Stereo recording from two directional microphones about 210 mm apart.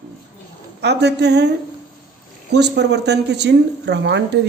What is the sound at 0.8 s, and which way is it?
Speech, 50° right (ahead or behind).